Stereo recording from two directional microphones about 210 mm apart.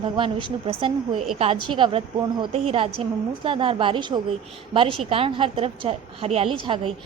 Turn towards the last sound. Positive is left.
turn(degrees=-25)  # may be behind; listen again after turning